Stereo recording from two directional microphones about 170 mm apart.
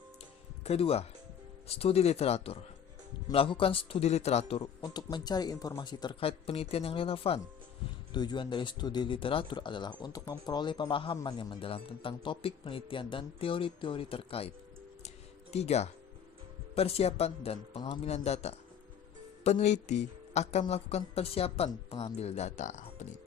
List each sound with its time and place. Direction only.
0.6 s speech: 35° left (ahead or behind)
15.5 s speech: 40° left (ahead or behind)